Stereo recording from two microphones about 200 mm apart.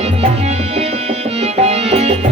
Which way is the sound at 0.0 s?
30° right (ahead or behind).